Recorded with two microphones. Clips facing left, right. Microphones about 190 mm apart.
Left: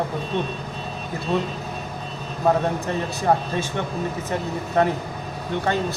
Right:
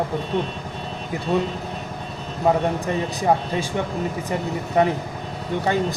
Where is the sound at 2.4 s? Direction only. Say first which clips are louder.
Right 1 dB; 15° right (ahead or behind).